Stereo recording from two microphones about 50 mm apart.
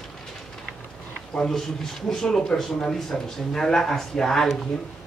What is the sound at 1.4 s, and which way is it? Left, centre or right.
A man's voice, centre.